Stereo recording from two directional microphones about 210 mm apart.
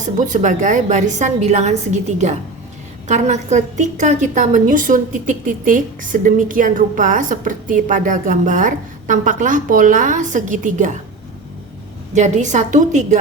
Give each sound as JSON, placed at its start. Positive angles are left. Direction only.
{"t": 0.0, "sound": "a woman's voice", "side_deg": -35}
{"t": 12.1, "sound": "a woman's voice", "side_deg": -35}